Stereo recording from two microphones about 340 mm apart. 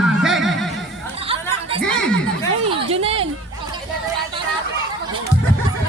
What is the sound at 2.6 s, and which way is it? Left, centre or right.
Speech, centre.